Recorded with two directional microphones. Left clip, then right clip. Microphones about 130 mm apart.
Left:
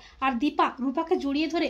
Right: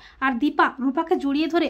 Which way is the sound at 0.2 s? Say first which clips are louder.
Right 4 dB; 25° right (ahead or behind).